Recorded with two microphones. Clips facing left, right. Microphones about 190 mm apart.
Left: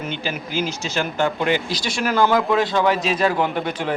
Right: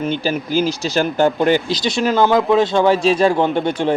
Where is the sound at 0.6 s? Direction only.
35° right (ahead or behind).